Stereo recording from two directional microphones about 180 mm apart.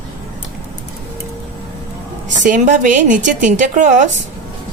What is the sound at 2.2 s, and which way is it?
Speech, 45° right (ahead or behind).